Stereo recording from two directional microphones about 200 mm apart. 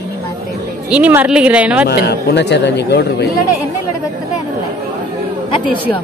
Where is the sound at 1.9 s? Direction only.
55° left (ahead or behind).